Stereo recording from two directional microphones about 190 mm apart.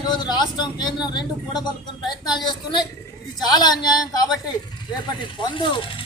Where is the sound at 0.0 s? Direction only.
20° left (ahead or behind).